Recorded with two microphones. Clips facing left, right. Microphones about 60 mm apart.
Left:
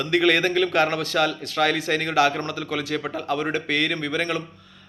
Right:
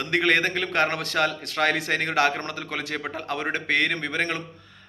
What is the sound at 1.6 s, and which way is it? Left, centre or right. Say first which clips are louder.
Speech: left 2 dB; right.